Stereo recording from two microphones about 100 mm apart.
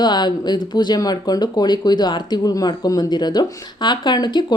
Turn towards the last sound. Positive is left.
turn(degrees=45)  # may be behind; listen again after turning